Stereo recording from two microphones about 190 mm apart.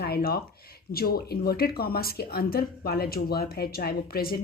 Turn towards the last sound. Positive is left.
turn(degrees=55)  # may be behind; listen again after turning